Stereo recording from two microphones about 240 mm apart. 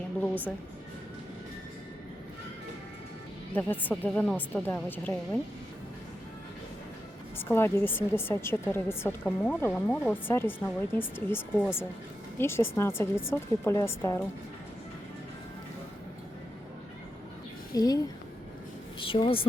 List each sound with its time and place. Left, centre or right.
0.2 s a woman's voice: centre
3.5 s a woman's voice: centre
7.3 s a woman's voice: centre
17.7 s a woman's voice: centre